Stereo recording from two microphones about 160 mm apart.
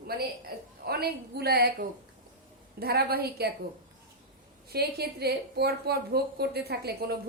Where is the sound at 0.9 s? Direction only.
75° right (ahead or behind).